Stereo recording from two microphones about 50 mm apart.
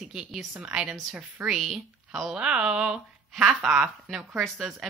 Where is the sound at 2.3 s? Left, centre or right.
Centre.